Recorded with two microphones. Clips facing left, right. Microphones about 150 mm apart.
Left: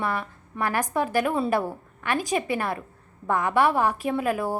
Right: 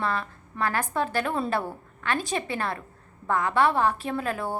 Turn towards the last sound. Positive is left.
turn(degrees=10)  # may be behind; listen again after turning